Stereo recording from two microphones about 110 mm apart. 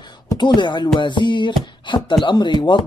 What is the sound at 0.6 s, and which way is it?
Speech, 45° left (ahead or behind).